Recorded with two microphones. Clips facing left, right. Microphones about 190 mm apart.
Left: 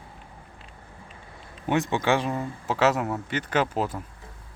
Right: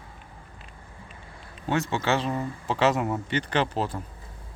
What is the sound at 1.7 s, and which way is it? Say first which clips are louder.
A man's voice: left 2 dB; 15° left (ahead or behind).